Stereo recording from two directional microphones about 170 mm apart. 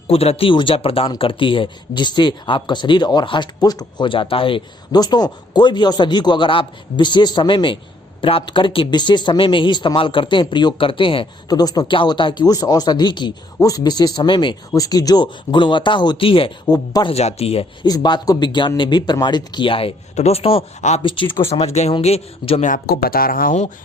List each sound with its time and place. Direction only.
0.1 s speech: 35° left (ahead or behind)
17.8 s speech: 25° left (ahead or behind)
22.7 s speech: 60° left (ahead or behind)